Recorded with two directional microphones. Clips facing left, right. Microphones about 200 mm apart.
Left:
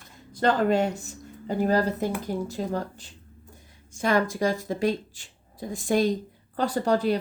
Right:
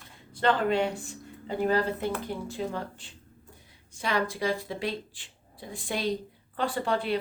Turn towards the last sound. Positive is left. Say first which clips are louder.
# left 5 dB
turn(degrees=40)  # may be behind; listen again after turning